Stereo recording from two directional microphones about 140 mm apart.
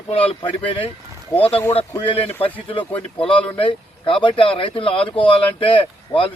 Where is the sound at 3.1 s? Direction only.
40° left (ahead or behind).